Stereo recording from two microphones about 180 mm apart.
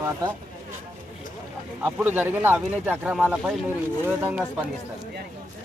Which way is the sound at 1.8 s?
10° right (ahead or behind).